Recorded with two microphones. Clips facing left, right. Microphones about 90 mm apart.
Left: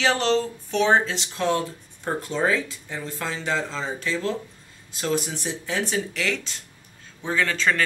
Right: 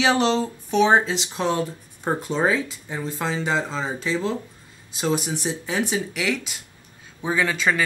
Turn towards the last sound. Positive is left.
turn(degrees=-10)  # may be behind; listen again after turning